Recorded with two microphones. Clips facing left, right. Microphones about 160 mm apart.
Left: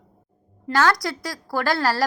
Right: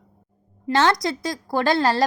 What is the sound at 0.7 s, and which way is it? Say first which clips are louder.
A woman's voice: right 1 dB; 25° right (ahead or behind).